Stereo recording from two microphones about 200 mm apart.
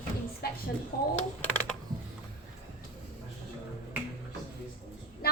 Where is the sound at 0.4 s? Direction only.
50° left (ahead or behind).